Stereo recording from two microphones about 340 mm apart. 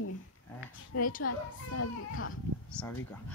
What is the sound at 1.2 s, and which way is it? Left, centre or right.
A child's voice, left.